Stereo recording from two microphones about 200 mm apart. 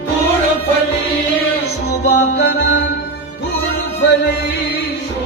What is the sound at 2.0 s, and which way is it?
Music, 55° left (ahead or behind).